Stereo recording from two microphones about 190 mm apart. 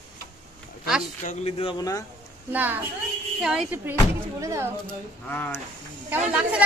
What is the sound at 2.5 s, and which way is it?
A woman's voice, 10° right (ahead or behind).